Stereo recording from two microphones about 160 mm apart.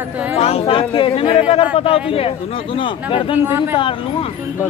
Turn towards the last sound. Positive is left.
turn(degrees=-15)  # may be behind; listen again after turning